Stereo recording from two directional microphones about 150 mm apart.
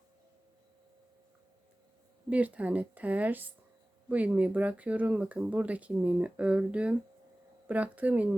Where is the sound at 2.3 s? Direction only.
10° right (ahead or behind).